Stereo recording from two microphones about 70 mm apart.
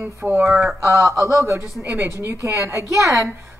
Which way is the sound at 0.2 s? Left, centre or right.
Right.